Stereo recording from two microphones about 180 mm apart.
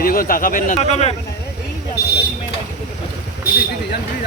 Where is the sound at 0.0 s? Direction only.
55° left (ahead or behind); by 1.1 s 35° left (ahead or behind).